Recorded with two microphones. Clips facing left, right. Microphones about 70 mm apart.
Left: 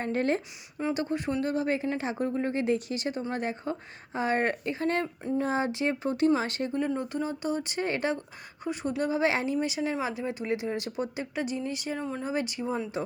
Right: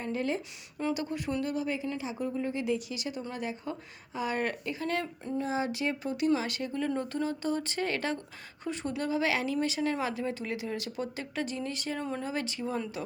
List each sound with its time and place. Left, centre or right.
0.0 s a woman's voice: left
0.9 s speech: left
5.7 s speech: left
6.7 s speech: centre
9.0 s speech: left
9.6 s speech: centre